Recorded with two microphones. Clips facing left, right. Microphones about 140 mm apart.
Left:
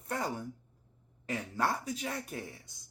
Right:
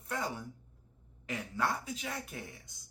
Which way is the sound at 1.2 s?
35° left (ahead or behind).